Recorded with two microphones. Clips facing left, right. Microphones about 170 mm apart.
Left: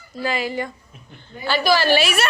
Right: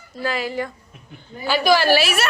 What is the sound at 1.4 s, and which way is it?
Speech, 10° right (ahead or behind).